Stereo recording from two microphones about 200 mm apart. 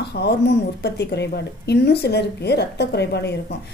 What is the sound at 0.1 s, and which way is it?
A woman's voice, 55° left (ahead or behind).